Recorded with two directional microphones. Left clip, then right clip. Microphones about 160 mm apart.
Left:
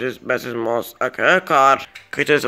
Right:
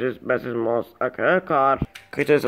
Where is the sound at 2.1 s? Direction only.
5° right (ahead or behind).